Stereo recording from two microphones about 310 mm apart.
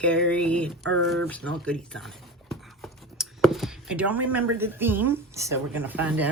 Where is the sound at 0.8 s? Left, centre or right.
Right.